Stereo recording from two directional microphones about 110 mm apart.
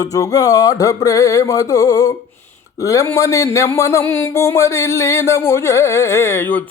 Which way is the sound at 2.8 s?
30° left (ahead or behind).